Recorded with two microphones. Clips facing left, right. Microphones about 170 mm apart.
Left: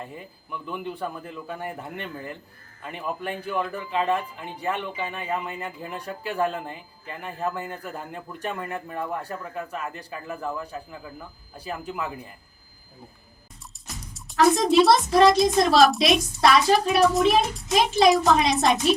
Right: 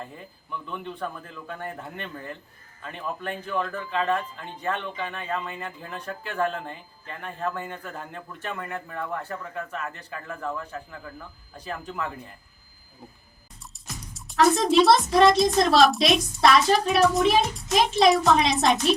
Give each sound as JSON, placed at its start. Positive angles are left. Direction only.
{"t": 0.0, "sound": "speech", "side_deg": 10}
{"t": 13.9, "sound": "speech", "side_deg": 0}